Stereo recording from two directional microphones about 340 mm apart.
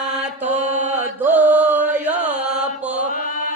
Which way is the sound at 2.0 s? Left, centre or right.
Centre.